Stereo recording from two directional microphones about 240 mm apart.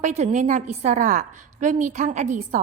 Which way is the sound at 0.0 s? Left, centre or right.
Right.